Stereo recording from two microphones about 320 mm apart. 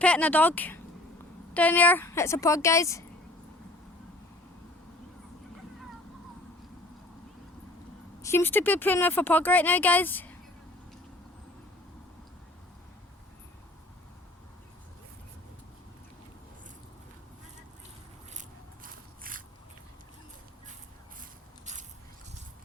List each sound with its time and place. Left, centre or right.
0.0 s a woman's voice: centre
8.2 s speech: centre
18.3 s biting: right